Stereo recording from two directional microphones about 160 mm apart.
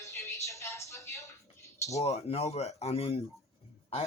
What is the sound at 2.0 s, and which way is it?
A man's voice, 40° left (ahead or behind).